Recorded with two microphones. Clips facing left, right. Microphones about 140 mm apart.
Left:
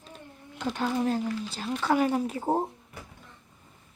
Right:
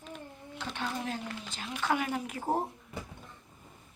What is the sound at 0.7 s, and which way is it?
Speech, 40° left (ahead or behind).